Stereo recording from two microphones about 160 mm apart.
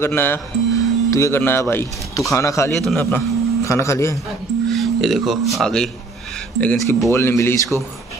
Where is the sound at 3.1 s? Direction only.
20° left (ahead or behind).